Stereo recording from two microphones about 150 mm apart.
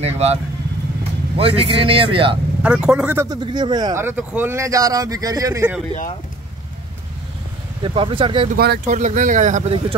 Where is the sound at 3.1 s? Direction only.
25° right (ahead or behind).